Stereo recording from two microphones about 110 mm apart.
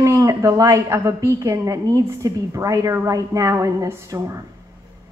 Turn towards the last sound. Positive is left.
turn(degrees=-30)  # may be behind; listen again after turning